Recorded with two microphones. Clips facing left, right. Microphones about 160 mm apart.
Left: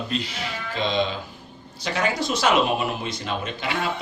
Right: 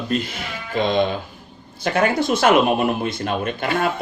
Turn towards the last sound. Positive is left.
turn(degrees=-50)  # may be behind; listen again after turning